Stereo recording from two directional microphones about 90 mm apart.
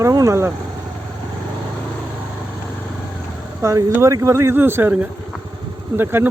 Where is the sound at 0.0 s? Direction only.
40° right (ahead or behind).